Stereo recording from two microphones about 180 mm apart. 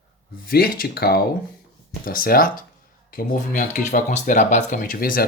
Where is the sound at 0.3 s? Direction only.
55° left (ahead or behind).